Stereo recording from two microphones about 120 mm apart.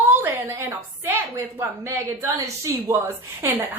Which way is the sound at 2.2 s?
20° right (ahead or behind).